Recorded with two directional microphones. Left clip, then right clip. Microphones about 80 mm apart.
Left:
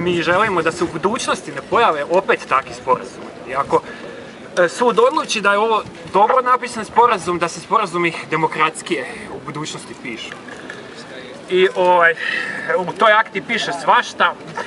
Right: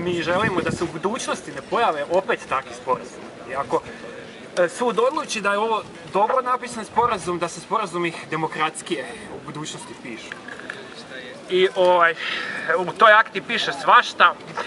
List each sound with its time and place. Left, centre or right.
0.0 s speech: centre
0.7 s speech: centre
4.8 s speech: centre
6.6 s a man's voice: centre
11.5 s speech: centre